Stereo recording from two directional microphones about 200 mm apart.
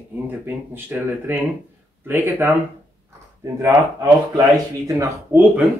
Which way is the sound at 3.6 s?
15° right (ahead or behind).